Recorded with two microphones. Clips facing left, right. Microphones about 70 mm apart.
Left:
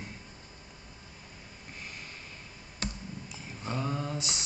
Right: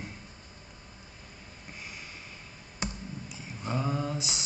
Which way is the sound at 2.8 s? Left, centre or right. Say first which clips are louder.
Right 2 dB; centre.